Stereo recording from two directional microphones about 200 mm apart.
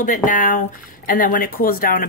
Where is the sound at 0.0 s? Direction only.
40° left (ahead or behind).